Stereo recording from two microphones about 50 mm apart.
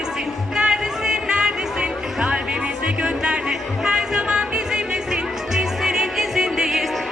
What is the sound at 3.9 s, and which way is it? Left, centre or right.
Music, centre.